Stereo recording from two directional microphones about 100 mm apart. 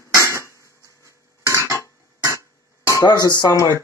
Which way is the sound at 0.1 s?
30° left (ahead or behind).